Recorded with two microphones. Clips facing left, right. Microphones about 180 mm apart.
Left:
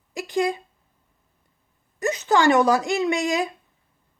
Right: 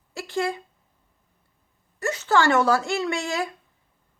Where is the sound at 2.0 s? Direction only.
20° left (ahead or behind).